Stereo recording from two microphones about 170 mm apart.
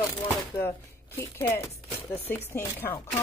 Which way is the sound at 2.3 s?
15° left (ahead or behind).